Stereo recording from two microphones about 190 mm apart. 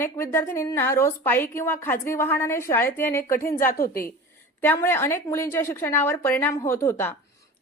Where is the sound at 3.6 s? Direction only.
50° left (ahead or behind).